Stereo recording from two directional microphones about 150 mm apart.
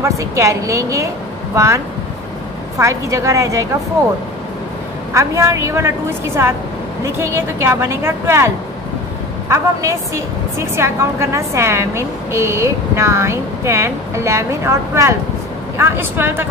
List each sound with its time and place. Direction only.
0.0 s a woman's voice: 20° right (ahead or behind)
2.8 s a woman's voice: 20° right (ahead or behind)
5.1 s a woman's voice: 20° right (ahead or behind)
9.5 s a woman's voice: 20° right (ahead or behind)